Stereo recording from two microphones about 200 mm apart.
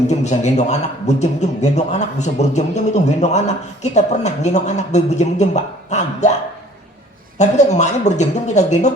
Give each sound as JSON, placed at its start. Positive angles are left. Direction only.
{"t": 0.1, "sound": "a man's voice", "side_deg": 35}
{"t": 7.3, "sound": "a man's voice", "side_deg": 35}